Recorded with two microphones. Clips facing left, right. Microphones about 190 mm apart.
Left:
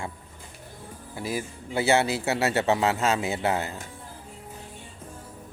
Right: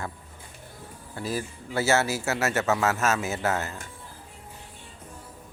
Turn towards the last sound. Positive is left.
turn(degrees=15)  # may be behind; listen again after turning